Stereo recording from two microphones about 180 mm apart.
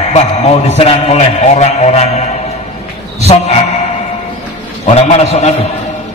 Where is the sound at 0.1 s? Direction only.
35° left (ahead or behind).